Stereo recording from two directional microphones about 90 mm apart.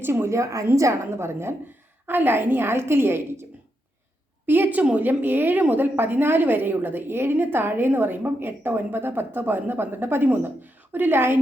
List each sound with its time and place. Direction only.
0.0 s a woman's voice: 25° right (ahead or behind)
4.4 s a woman's voice: 20° right (ahead or behind)